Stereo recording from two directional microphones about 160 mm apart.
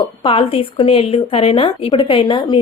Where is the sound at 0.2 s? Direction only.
35° left (ahead or behind).